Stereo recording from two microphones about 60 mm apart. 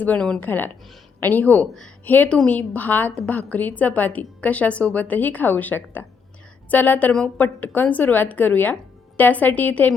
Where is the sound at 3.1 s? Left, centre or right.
Centre.